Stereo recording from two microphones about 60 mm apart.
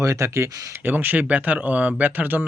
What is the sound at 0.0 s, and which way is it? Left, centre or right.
Speech, right.